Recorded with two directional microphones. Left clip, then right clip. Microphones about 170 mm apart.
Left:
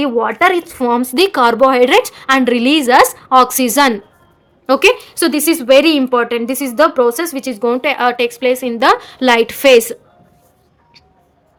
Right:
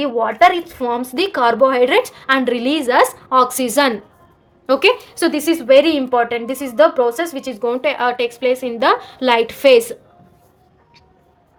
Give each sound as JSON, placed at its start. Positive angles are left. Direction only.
{"t": 0.0, "sound": "a woman's voice", "side_deg": 40}